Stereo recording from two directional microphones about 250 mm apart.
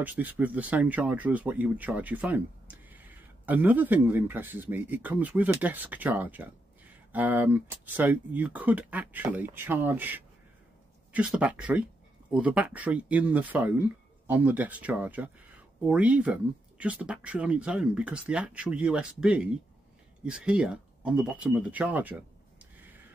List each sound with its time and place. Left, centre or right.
0.0 s speech: centre